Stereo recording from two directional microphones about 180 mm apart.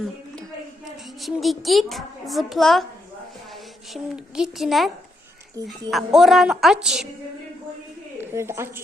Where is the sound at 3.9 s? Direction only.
Centre (ahead or behind).